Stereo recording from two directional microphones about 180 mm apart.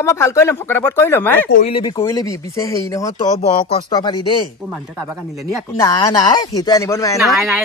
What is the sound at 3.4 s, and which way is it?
Speech, 40° left (ahead or behind).